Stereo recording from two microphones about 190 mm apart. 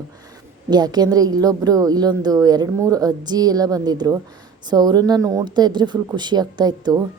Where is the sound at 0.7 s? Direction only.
20° right (ahead or behind).